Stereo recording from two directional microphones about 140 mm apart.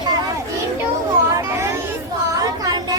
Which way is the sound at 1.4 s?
20° right (ahead or behind).